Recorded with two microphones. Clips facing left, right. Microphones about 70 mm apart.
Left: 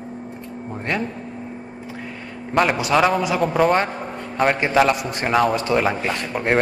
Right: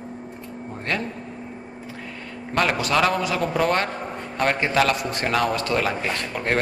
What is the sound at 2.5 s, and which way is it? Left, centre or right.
Speech, centre.